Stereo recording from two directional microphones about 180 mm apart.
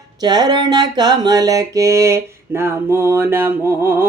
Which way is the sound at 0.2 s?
20° right (ahead or behind).